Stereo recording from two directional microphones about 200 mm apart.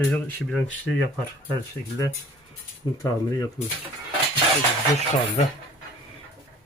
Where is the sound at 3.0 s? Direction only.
15° left (ahead or behind).